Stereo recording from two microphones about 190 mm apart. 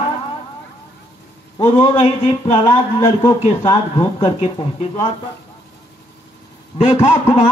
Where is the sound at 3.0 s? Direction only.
20° left (ahead or behind).